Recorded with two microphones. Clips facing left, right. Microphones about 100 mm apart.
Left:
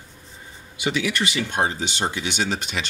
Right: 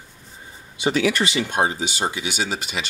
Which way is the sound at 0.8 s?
35° right (ahead or behind).